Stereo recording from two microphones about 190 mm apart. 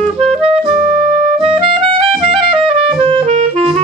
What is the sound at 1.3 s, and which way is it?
Music, 30° right (ahead or behind).